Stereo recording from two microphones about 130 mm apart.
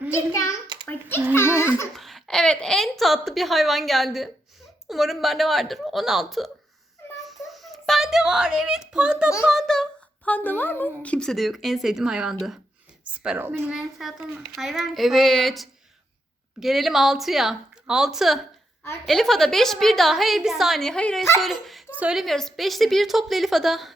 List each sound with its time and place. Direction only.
0.9 s a child's voice: 15° left (ahead or behind)
2.0 s a child's voice: centre (ahead or behind)
7.5 s a child's voice: centre (ahead or behind)